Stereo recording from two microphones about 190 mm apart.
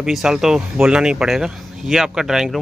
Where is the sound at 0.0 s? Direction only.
5° right (ahead or behind).